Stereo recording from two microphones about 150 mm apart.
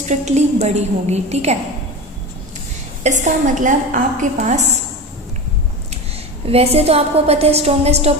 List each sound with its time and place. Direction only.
0.1 s a woman's voice: 50° right (ahead or behind)
3.0 s a woman's voice: 55° right (ahead or behind)
6.4 s a woman's voice: 40° right (ahead or behind)